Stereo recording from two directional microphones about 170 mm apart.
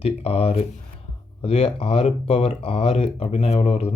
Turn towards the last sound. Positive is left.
turn(degrees=35)  # may be behind; listen again after turning